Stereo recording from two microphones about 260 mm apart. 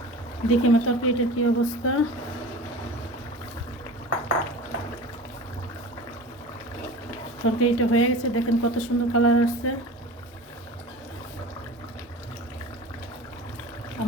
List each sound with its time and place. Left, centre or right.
0.4 s a woman's voice: left
7.4 s a woman's voice: left